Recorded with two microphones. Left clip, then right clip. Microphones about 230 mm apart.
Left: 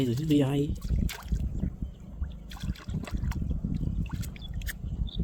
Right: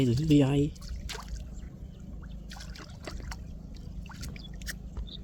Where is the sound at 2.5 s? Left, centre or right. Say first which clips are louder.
Left 5 dB; centre.